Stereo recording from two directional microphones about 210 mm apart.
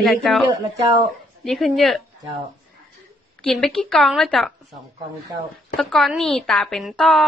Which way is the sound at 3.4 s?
Centre (ahead or behind).